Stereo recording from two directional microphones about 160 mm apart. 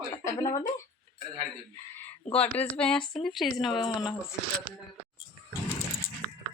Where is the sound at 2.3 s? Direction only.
10° left (ahead or behind).